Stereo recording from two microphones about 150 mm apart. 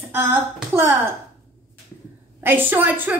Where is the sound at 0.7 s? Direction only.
15° right (ahead or behind).